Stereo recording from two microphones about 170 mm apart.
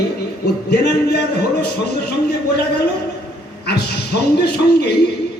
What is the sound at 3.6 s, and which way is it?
Speech, 75° left (ahead or behind).